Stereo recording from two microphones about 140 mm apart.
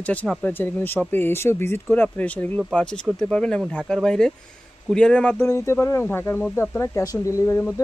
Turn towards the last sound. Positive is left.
turn(degrees=20)  # may be behind; listen again after turning